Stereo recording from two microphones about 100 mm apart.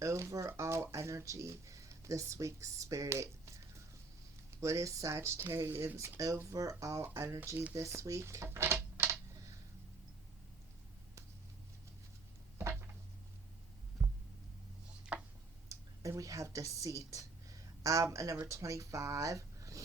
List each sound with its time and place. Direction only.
0.0 s speech: 30° right (ahead or behind)
4.6 s speech: 30° right (ahead or behind)
14.0 s a sound: 5° right (ahead or behind)
15.1 s tick-tock: 10° right (ahead or behind)
15.7 s a sound: 35° right (ahead or behind)
17.8 s speech: 30° right (ahead or behind)